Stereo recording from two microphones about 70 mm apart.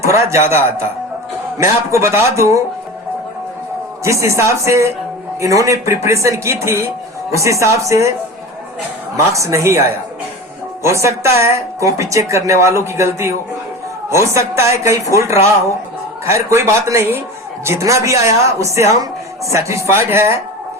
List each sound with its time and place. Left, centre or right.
0.0 s a man's voice: right
4.0 s speech: right
9.1 s speech: right
10.8 s speech: right